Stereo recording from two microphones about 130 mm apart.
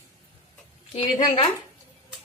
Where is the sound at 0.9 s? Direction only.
40° left (ahead or behind).